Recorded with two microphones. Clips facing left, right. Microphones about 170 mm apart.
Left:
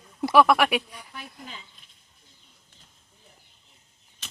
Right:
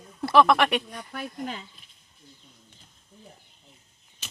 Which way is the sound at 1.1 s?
55° right (ahead or behind).